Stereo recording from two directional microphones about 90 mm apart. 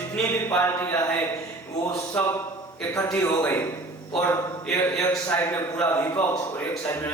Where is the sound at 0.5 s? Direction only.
25° left (ahead or behind).